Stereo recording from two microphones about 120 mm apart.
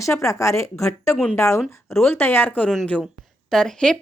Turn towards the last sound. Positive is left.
turn(degrees=5)  # may be behind; listen again after turning